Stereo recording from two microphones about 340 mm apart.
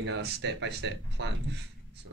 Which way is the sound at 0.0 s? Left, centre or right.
Right.